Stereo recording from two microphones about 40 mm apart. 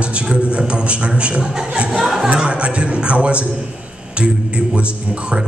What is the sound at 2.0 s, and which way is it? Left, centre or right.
Speech, centre.